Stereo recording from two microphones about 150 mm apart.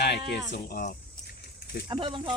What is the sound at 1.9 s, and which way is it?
Speech, 30° right (ahead or behind).